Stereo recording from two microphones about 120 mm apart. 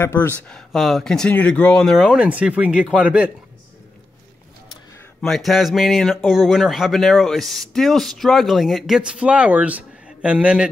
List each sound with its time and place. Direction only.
0.0 s speech: 20° left (ahead or behind)
0.4 s speech: 5° left (ahead or behind)
2.0 s speech: 5° right (ahead or behind)
5.2 s speech: centre (ahead or behind)